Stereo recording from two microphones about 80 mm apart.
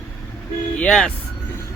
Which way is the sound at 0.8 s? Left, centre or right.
Centre.